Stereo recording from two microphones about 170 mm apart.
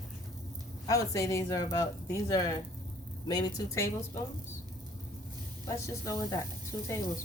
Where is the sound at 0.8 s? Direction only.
20° left (ahead or behind).